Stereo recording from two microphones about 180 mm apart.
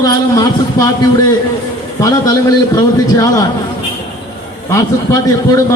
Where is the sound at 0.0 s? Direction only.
20° left (ahead or behind).